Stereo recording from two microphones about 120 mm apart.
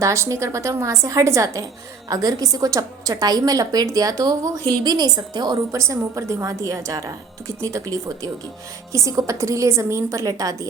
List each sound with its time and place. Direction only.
0.0 s a woman's voice: 25° right (ahead or behind)
5.7 s a woman's voice: 25° right (ahead or behind)